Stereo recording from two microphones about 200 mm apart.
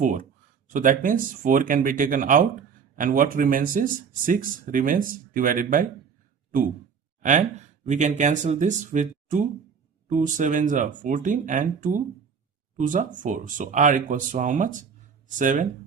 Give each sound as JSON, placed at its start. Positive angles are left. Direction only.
{"t": 0.0, "sound": "speech", "side_deg": -40}
{"t": 7.2, "sound": "speech", "side_deg": -35}